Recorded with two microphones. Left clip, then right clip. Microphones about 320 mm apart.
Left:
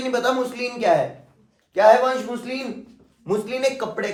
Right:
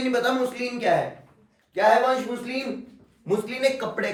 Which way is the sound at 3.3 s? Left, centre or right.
Centre.